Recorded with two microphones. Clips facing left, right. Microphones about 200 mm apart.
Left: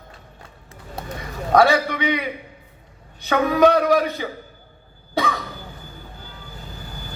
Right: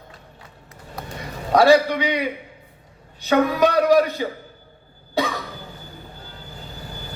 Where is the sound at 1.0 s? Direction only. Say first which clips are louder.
Left 2 dB; 30° left (ahead or behind).